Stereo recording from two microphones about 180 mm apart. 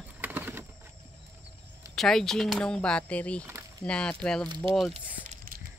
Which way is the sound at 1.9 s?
Centre (ahead or behind).